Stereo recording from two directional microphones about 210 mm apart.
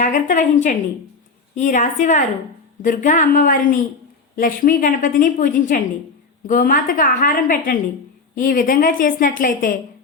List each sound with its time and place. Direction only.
0.0 s a woman's voice: 40° left (ahead or behind)